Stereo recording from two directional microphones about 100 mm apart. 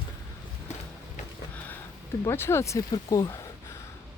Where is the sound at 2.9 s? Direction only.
40° left (ahead or behind).